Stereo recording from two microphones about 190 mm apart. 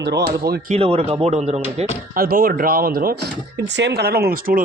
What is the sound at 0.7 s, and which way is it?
Speech, 30° right (ahead or behind).